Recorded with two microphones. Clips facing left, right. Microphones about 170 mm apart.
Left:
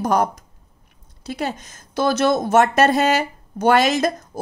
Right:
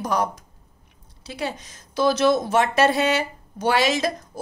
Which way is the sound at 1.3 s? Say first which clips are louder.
Left 3 dB; 50° left (ahead or behind).